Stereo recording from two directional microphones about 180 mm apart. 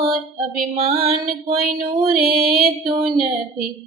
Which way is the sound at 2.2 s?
55° right (ahead or behind).